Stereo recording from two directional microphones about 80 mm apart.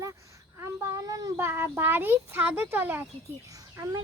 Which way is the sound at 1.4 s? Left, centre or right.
Right.